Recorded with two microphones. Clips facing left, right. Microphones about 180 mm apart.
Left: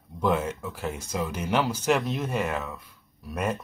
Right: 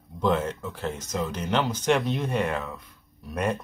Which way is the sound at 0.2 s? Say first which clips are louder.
Right 1 dB; 5° left (ahead or behind).